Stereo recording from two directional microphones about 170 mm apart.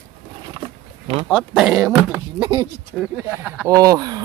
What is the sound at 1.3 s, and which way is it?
Speech, centre (ahead or behind).